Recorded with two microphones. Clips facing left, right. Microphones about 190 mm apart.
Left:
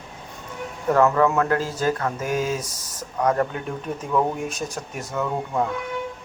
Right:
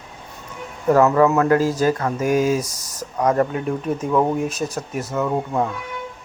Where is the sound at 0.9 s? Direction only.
10° right (ahead or behind).